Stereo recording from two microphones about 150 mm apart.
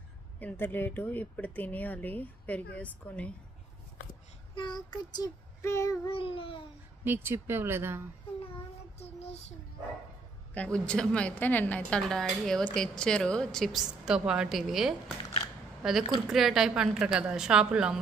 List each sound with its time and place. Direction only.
0.4 s speech: 10° left (ahead or behind)
4.6 s child singing: 30° left (ahead or behind)
6.0 s babbling: 35° left (ahead or behind)
7.1 s speech: 15° right (ahead or behind)
9.0 s a sound: 45° left (ahead or behind)
10.5 s a woman's voice: 10° left (ahead or behind)